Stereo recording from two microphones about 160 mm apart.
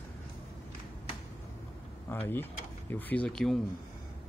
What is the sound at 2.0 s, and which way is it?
Speech, 10° left (ahead or behind).